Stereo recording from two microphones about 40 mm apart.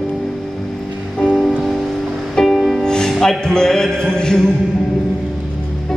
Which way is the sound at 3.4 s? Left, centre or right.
Centre.